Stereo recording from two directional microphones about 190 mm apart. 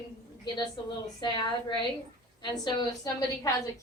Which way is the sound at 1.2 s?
25° left (ahead or behind).